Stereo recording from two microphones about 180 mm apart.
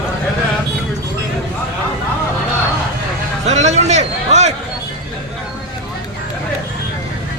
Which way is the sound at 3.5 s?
40° right (ahead or behind).